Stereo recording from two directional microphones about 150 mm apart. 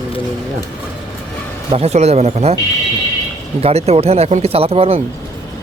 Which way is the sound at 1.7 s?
45° right (ahead or behind).